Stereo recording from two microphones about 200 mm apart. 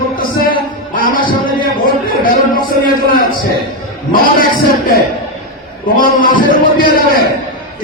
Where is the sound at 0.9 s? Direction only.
45° left (ahead or behind).